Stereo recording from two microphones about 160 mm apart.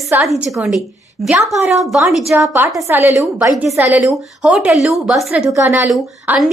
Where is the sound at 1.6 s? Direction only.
15° right (ahead or behind).